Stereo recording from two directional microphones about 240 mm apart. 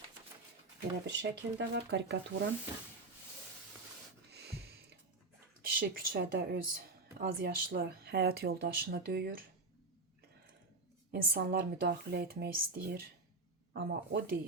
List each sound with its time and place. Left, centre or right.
1.0 s speech: right
4.3 s gasp: right
5.6 s speech: right
11.1 s speech: right